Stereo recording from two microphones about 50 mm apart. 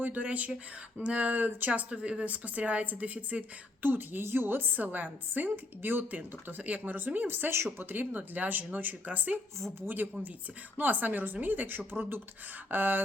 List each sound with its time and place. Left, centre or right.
0.0 s speech: right
1.9 s speech: right
3.8 s a woman's voice: right
6.1 s speech: right
7.5 s speech: right
7.9 s a woman's voice: right